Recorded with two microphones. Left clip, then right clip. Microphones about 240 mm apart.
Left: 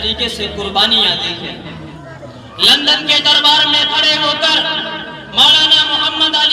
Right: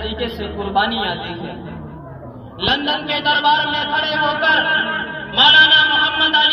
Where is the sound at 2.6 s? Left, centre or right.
Centre.